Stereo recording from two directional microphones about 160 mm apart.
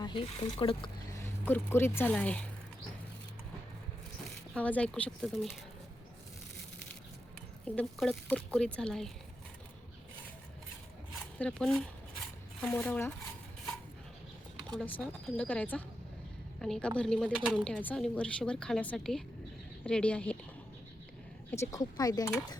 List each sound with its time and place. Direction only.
0.0 s speech: 30° left (ahead or behind)
1.1 s speech: 15° left (ahead or behind)
4.5 s speech: 10° left (ahead or behind)
7.8 s speech: centre (ahead or behind)
11.3 s speech: 5° left (ahead or behind)
14.8 s speech: 10° left (ahead or behind)
21.5 s speech: 20° left (ahead or behind)